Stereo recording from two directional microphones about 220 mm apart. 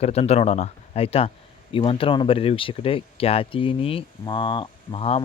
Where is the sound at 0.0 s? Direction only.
30° left (ahead or behind).